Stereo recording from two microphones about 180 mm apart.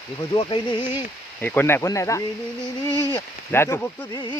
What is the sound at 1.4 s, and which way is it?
Speech, 10° left (ahead or behind).